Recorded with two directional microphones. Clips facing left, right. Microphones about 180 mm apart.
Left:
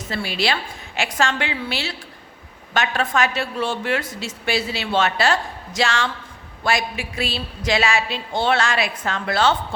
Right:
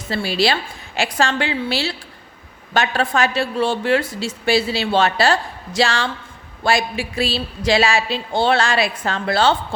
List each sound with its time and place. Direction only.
0.1 s a woman's voice: 30° right (ahead or behind)